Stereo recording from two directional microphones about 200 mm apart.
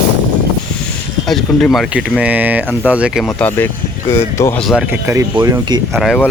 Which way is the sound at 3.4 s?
10° left (ahead or behind).